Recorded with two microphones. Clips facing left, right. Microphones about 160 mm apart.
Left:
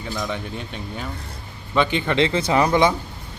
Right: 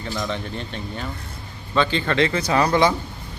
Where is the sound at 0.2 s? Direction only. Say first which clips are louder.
Right 1 dB; 10° left (ahead or behind).